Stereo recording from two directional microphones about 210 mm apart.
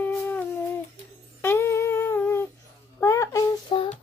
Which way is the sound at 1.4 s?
10° left (ahead or behind).